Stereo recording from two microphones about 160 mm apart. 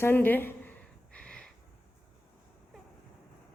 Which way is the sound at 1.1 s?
5° left (ahead or behind).